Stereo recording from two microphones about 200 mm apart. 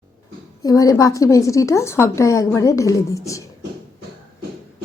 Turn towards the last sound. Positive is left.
turn(degrees=15)  # may be behind; listen again after turning